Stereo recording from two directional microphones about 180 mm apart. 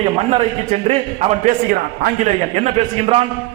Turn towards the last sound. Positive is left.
turn(degrees=-35)  # may be behind; listen again after turning